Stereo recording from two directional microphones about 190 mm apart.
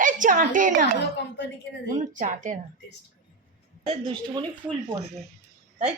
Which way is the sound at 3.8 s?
30° right (ahead or behind).